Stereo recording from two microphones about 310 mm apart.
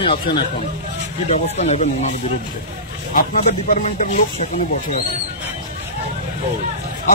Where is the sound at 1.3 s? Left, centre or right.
Left.